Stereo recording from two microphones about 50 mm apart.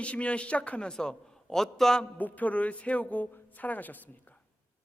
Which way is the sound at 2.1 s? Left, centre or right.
Left.